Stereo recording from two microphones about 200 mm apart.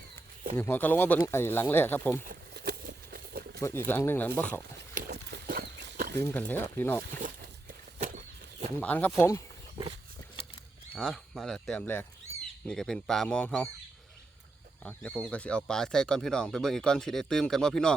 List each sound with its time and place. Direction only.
0.5 s speech: 10° left (ahead or behind)
2.3 s a sound: 55° right (ahead or behind)
3.6 s speech: 10° left (ahead or behind)
4.9 s dog: 50° right (ahead or behind)
6.1 s speech: 10° left (ahead or behind)
7.2 s a sound: 40° right (ahead or behind)
8.8 s speech: 5° left (ahead or behind)
10.9 s speech: centre (ahead or behind)
14.8 s speech: 5° left (ahead or behind)